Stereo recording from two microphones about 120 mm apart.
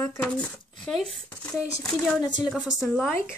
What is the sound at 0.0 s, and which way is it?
Speech, 20° left (ahead or behind).